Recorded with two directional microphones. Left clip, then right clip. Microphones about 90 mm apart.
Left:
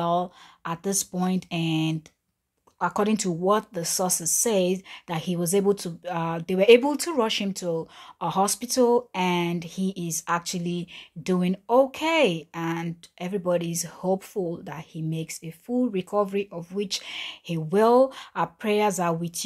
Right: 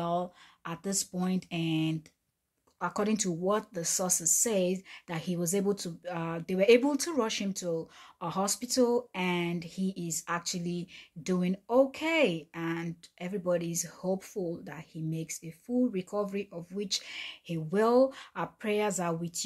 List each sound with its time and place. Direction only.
0.0 s speech: 40° left (ahead or behind)